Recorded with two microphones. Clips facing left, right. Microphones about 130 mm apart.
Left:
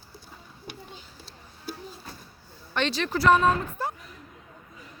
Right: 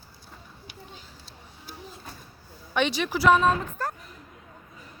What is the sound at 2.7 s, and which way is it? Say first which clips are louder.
Speech: right 1 dB; 10° right (ahead or behind).